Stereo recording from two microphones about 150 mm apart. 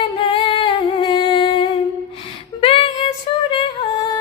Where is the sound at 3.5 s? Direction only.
35° left (ahead or behind).